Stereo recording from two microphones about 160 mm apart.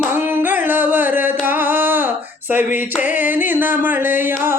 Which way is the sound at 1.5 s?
10° right (ahead or behind).